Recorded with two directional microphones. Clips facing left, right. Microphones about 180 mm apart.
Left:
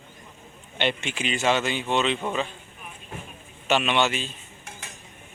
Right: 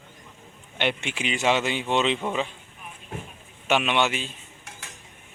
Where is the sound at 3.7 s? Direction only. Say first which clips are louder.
Even; 10° right (ahead or behind).